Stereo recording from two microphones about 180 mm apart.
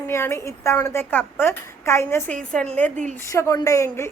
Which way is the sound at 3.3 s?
15° left (ahead or behind).